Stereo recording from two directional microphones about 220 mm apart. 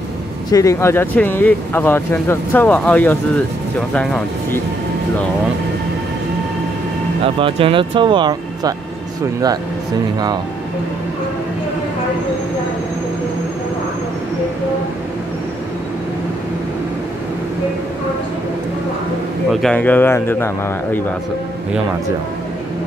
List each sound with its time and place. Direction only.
0.5 s speech: 15° left (ahead or behind)
7.3 s speech: 25° right (ahead or behind)
19.5 s speech: 5° left (ahead or behind)